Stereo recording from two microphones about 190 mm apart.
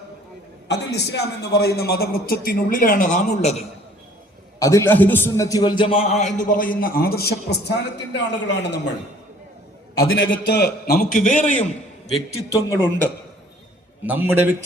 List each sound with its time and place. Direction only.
0.7 s a man's voice: 60° left (ahead or behind); by 3.5 s 40° left (ahead or behind)
4.6 s a man's voice: 15° left (ahead or behind); by 8.8 s 65° left (ahead or behind)
10.0 s a man's voice: 85° left; by 11.6 s 40° left (ahead or behind)
12.7 s a man's voice: 10° left (ahead or behind)
14.1 s a man's voice: 10° right (ahead or behind)